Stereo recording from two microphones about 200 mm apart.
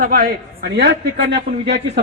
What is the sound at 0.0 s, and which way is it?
A man's voice, 45° right (ahead or behind).